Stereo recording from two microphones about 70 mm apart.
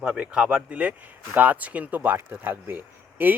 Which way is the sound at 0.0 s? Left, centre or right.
Centre.